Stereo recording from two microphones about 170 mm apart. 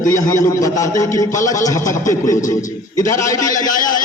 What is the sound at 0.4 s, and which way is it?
A man's voice, 20° left (ahead or behind).